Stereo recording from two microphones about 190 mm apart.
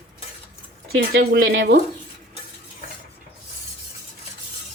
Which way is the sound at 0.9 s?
90° right.